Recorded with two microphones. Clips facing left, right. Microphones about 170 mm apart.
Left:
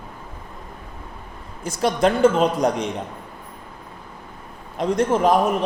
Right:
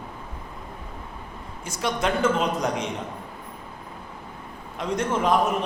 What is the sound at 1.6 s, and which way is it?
Speech, 35° left (ahead or behind).